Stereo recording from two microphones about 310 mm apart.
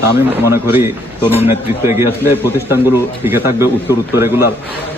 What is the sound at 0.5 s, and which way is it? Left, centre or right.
A man's voice, centre.